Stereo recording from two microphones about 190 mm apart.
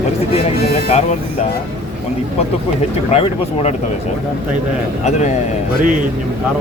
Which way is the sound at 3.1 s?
30° left (ahead or behind).